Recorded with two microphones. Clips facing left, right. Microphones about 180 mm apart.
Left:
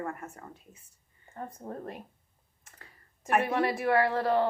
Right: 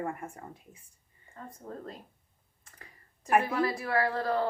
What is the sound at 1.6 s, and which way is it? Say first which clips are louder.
Speech: left 1 dB; 20° left (ahead or behind).